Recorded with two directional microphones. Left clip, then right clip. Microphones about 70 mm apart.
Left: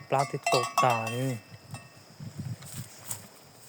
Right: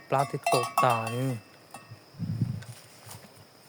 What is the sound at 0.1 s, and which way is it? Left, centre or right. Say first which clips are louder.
Speech: even; right.